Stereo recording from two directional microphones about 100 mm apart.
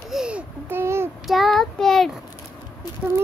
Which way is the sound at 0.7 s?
25° right (ahead or behind).